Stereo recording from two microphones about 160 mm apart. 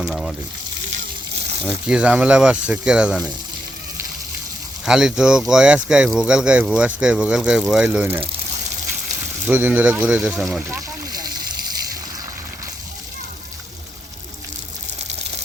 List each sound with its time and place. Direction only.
0.0 s speech: centre (ahead or behind)
1.6 s speech: 5° right (ahead or behind)
4.9 s speech: 5° right (ahead or behind)
9.5 s speech: 10° right (ahead or behind)